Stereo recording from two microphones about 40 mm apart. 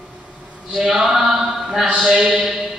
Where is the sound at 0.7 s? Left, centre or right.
Centre.